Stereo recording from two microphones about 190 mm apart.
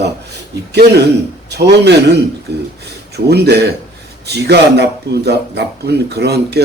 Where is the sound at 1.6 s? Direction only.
60° right (ahead or behind).